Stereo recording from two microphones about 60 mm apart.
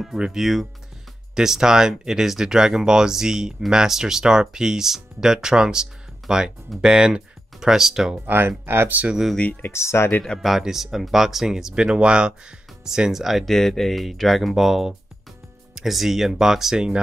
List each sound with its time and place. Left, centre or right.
0.0 s speech: centre
8.3 s speech: right
9.6 s speech: left
10.4 s speech: centre
13.5 s speech: centre